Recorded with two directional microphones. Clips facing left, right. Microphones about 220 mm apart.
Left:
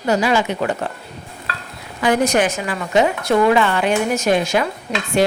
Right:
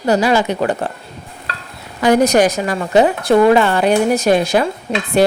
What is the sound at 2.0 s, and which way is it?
A woman's voice, 40° right (ahead or behind).